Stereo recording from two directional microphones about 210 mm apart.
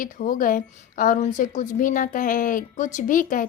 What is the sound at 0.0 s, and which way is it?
A woman's voice, 40° left (ahead or behind).